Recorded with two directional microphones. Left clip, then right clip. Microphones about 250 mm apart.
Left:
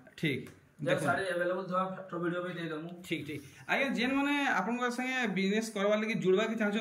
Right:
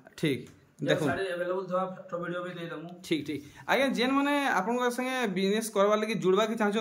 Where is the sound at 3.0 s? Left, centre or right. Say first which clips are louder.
Right 10 dB; centre.